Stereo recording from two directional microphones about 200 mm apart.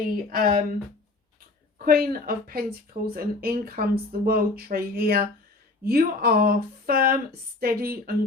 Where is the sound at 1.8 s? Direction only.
50° right (ahead or behind).